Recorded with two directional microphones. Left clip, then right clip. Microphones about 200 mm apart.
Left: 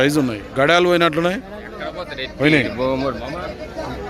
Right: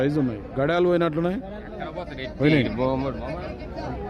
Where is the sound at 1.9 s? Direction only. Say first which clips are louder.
Left 6 dB; 55° right (ahead or behind).